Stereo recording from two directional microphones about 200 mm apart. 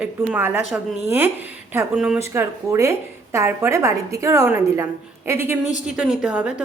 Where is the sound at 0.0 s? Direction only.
5° right (ahead or behind).